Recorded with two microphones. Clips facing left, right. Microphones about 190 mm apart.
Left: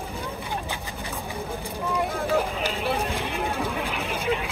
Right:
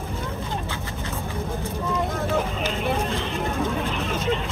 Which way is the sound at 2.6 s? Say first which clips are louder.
Right 1 dB; 15° left (ahead or behind).